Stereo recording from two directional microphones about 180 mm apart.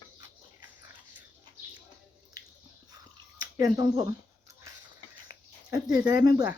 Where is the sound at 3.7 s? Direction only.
25° right (ahead or behind).